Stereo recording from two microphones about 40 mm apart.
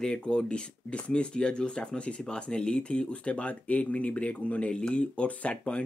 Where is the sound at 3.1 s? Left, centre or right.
Left.